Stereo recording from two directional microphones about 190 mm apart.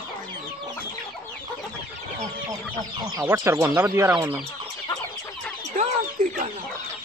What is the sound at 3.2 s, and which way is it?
Speech, 15° right (ahead or behind).